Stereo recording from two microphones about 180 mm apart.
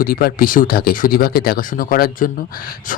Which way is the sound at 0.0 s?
55° left (ahead or behind).